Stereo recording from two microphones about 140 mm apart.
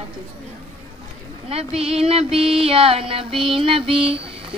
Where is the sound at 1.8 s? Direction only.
45° right (ahead or behind).